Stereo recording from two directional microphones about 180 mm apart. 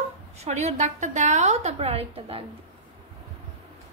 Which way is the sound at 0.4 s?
35° right (ahead or behind).